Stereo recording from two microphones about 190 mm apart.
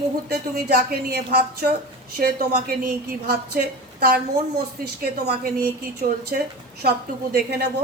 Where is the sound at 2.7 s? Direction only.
50° right (ahead or behind).